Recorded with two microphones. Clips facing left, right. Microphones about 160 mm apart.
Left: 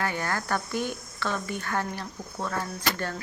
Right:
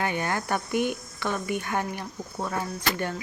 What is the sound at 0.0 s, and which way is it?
Speech, 20° right (ahead or behind).